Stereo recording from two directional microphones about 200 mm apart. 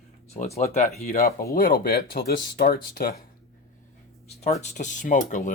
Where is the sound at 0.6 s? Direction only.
35° left (ahead or behind).